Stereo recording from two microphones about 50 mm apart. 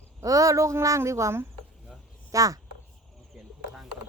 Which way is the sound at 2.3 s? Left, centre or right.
Right.